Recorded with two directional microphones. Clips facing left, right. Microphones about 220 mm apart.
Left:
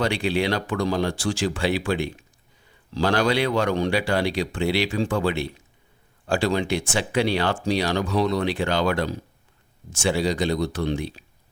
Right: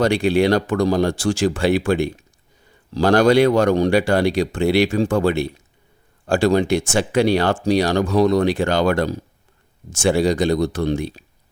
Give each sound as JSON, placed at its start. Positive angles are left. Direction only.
{"t": 0.0, "sound": "speech", "side_deg": -45}